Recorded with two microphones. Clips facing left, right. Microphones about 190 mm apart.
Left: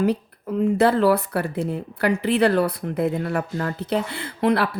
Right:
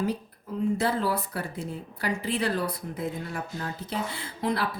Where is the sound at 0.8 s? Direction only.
70° left (ahead or behind).